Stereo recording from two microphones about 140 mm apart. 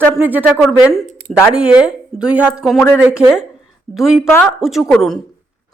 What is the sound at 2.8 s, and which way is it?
Speech, 15° left (ahead or behind).